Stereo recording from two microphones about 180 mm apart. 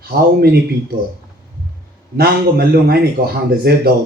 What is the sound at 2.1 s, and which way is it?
Speech, 60° right (ahead or behind).